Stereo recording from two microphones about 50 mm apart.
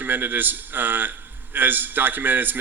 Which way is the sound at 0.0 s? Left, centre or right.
Right.